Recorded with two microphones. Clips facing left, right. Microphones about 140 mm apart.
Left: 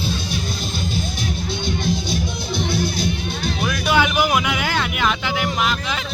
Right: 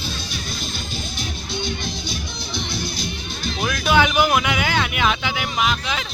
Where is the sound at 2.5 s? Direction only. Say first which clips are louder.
Left 6 dB; 55° left (ahead or behind).